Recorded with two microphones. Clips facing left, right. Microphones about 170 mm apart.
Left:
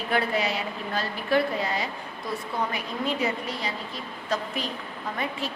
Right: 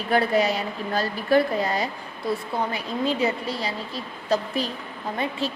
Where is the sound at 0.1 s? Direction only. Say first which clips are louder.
Right 5 dB; 40° right (ahead or behind).